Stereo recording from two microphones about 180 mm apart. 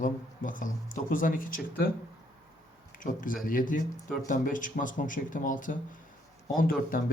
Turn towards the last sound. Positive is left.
turn(degrees=50)  # may be behind; listen again after turning